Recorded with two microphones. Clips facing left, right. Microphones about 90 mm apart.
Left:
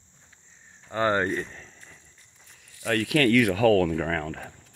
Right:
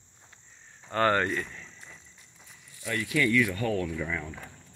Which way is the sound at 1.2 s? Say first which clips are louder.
Left 3 dB; 35° left (ahead or behind).